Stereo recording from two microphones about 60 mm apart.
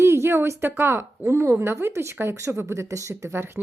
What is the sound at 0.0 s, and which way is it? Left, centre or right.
A woman's voice, right.